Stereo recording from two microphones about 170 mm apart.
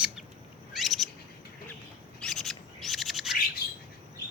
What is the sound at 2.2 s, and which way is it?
Bird, centre (ahead or behind).